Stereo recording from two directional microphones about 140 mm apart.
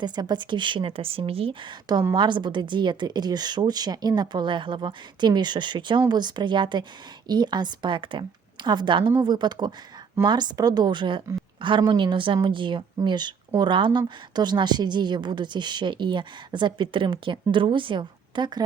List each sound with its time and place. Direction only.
0.0 s a woman's voice: 30° right (ahead or behind)